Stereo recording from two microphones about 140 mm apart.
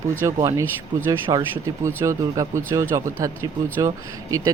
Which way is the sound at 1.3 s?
35° right (ahead or behind).